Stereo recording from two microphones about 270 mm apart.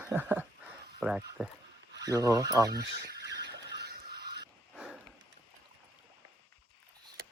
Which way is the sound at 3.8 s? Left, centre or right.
Right.